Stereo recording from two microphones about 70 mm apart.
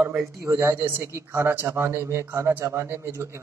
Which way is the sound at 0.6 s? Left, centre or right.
Right.